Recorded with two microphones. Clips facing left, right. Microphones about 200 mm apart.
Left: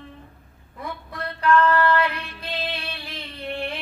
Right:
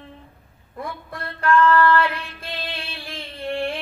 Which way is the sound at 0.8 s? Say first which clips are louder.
Right 1 dB; 50° right (ahead or behind).